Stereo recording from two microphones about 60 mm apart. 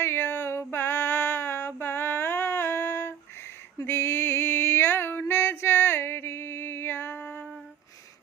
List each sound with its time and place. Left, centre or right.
0.0 s female singing: left
3.8 s music: left